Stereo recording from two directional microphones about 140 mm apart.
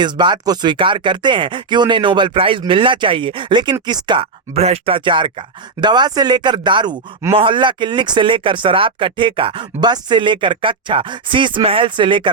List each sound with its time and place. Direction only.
0.0 s speech: 35° right (ahead or behind)